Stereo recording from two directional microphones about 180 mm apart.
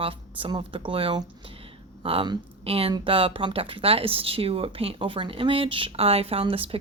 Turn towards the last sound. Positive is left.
turn(degrees=-30)  # may be behind; listen again after turning